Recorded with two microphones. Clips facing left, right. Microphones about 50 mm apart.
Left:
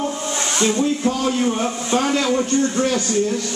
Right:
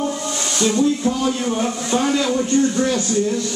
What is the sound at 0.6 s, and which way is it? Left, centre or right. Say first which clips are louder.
A man's voice: right 2 dB; left.